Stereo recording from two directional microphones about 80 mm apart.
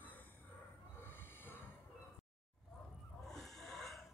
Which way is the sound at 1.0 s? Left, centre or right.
Left.